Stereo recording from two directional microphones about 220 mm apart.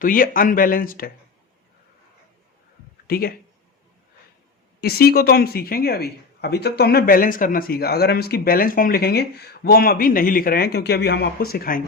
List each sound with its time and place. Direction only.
0.0 s speech: 40° left (ahead or behind)
3.1 s speech: 40° left (ahead or behind)
4.8 s speech: 45° left (ahead or behind)